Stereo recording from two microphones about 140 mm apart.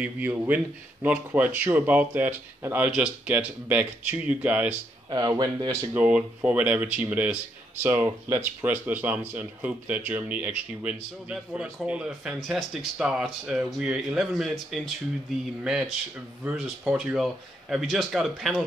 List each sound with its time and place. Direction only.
0.0 s speech: 10° right (ahead or behind)
5.1 s speech: 30° right (ahead or behind)
5.9 s speech: 10° right (ahead or behind)